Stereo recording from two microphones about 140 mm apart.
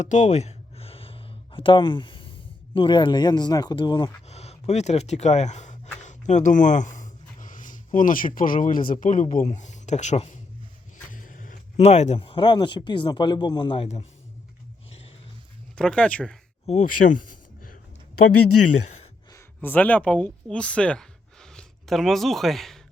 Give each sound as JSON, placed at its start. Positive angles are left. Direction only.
{"t": 0.0, "sound": "a sound", "side_deg": 60}
{"t": 2.7, "sound": "speech", "side_deg": 35}
{"t": 4.3, "sound": "a sound", "side_deg": 50}
{"t": 7.9, "sound": "speech", "side_deg": 75}
{"t": 8.9, "sound": "speech", "side_deg": 70}
{"t": 11.1, "sound": "speech", "side_deg": 70}
{"t": 13.8, "sound": "speech", "side_deg": 50}
{"t": 15.7, "sound": "speech", "side_deg": 5}
{"t": 16.6, "sound": "speech", "side_deg": 55}
{"t": 19.3, "sound": "speech", "side_deg": 15}